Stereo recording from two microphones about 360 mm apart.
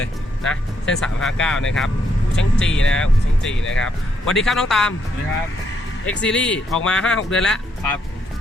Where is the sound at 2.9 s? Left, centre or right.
Centre.